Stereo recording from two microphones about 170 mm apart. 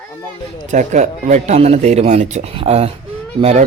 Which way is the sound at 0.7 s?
45° right (ahead or behind).